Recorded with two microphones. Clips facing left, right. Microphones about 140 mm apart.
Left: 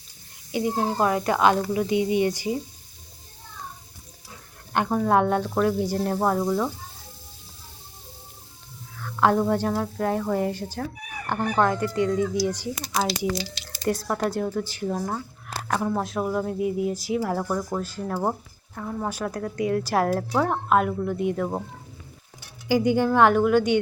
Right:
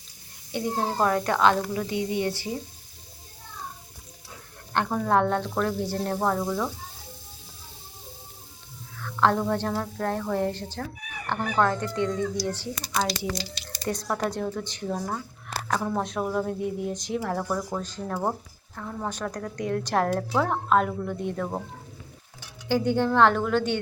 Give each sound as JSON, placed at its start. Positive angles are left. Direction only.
{"t": 0.5, "sound": "speech", "side_deg": 5}
{"t": 4.7, "sound": "speech", "side_deg": 10}
{"t": 9.0, "sound": "a woman's voice", "side_deg": 10}
{"t": 22.7, "sound": "speech", "side_deg": 10}